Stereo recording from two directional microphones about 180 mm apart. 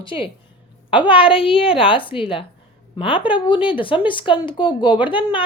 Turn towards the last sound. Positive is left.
turn(degrees=30)  # may be behind; listen again after turning